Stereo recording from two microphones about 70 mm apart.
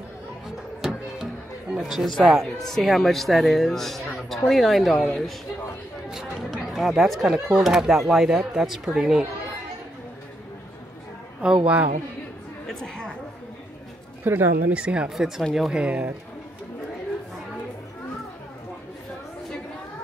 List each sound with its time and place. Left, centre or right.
0.8 s music: centre
2.7 s speech: centre
6.0 s chatter: centre
7.5 s speech: centre
11.4 s a man's voice: centre
12.6 s chatter: centre
14.2 s a woman's voice: right
14.7 s a man's voice: centre
15.8 s speech: right